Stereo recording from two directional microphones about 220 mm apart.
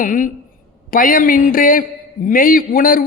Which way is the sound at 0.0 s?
35° left (ahead or behind).